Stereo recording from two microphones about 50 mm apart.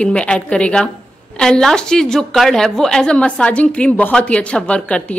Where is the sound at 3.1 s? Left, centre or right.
Left.